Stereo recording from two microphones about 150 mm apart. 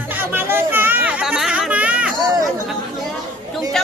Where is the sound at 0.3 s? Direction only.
15° right (ahead or behind).